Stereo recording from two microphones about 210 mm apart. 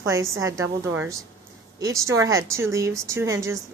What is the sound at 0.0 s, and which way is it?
A woman's voice, 15° right (ahead or behind).